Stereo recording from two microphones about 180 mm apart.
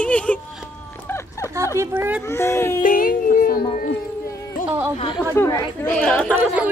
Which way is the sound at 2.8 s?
50° left (ahead or behind).